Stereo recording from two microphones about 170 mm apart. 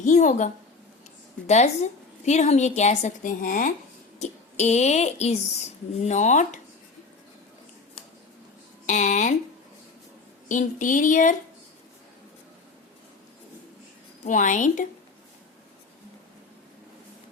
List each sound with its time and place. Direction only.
0.0 s a woman's voice: 45° left (ahead or behind)
8.9 s a woman's voice: 45° left (ahead or behind)
10.5 s a woman's voice: 50° left (ahead or behind)
14.3 s a woman's voice: 50° left (ahead or behind)